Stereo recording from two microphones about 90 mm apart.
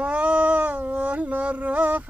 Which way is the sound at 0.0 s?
15° right (ahead or behind).